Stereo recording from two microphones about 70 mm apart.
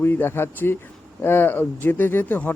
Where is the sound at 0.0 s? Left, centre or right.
Left.